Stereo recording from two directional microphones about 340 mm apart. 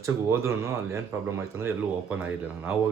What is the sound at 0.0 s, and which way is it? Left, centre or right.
Speech, centre.